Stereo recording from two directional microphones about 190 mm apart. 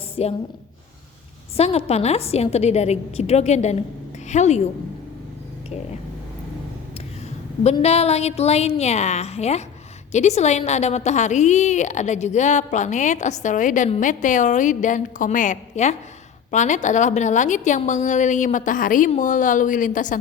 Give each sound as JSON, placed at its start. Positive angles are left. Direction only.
{"t": 0.2, "sound": "a woman's voice", "side_deg": 30}
{"t": 1.5, "sound": "a woman's voice", "side_deg": 35}
{"t": 7.6, "sound": "a woman's voice", "side_deg": 35}